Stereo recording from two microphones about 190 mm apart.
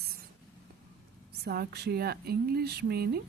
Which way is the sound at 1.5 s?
60° right (ahead or behind).